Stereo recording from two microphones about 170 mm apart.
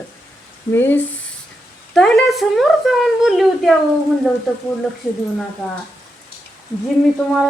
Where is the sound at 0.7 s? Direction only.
15° left (ahead or behind).